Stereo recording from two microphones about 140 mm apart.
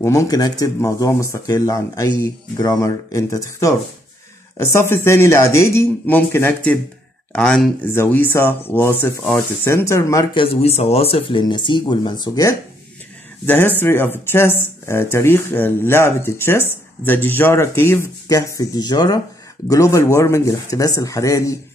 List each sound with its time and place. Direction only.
0.0 s speech: 20° left (ahead or behind); by 7.9 s 5° left (ahead or behind)
7.9 s speech: 15° left (ahead or behind)
10.3 s speech: 40° left (ahead or behind)
13.5 s speech: 15° left (ahead or behind)